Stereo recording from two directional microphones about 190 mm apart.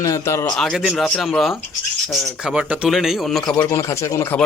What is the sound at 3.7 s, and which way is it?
Speech, 15° left (ahead or behind).